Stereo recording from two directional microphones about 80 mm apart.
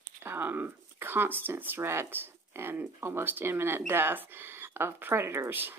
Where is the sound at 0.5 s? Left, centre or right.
Right.